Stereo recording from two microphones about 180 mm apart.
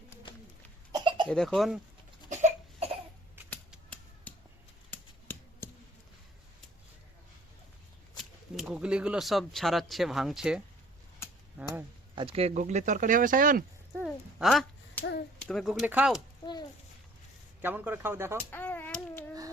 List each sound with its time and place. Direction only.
0.9 s cough: 25° right (ahead or behind)
1.3 s speech: 5° left (ahead or behind)
2.3 s cough: 40° right (ahead or behind)
3.8 s a sound: 10° left (ahead or behind)
8.1 s speech: centre (ahead or behind)
12.1 s speech: 30° right (ahead or behind); by 13.7 s 50° right (ahead or behind)
14.3 s a sound: centre (ahead or behind)
15.4 s speech: 5° left (ahead or behind)
17.6 s speech: 10° right (ahead or behind)
18.5 s a sound: 10° left (ahead or behind)